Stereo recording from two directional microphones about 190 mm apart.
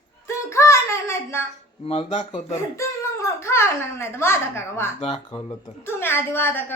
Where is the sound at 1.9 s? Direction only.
35° left (ahead or behind).